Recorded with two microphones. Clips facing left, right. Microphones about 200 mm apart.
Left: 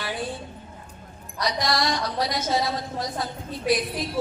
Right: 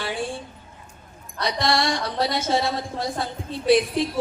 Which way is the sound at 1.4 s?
25° right (ahead or behind).